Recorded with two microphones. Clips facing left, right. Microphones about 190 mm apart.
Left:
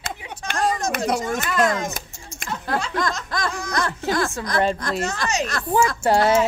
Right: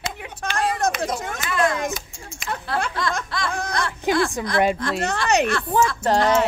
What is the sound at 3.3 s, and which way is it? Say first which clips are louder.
Laughter: left 2 dB; 45° left (ahead or behind).